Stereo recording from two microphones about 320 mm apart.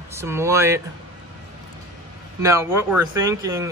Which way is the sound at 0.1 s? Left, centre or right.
Centre.